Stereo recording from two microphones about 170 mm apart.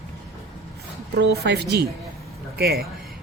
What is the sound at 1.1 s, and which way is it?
Speech, 80° right.